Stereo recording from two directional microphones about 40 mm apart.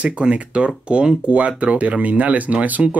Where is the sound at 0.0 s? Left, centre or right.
Right.